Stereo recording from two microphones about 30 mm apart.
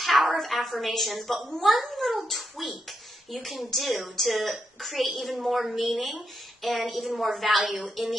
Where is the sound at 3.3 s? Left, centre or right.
Centre.